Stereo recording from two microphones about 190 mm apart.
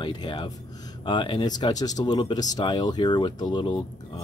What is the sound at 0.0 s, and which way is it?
Speech, 25° left (ahead or behind).